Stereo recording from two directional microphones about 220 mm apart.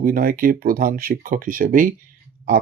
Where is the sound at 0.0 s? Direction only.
40° right (ahead or behind).